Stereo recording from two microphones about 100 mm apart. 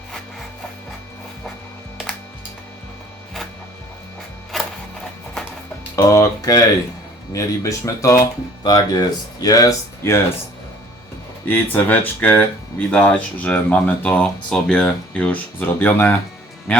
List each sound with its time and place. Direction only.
4.5 s music: centre (ahead or behind)
6.0 s speech: 30° left (ahead or behind)
10.0 s speech: 25° left (ahead or behind)
11.4 s speech: 15° left (ahead or behind)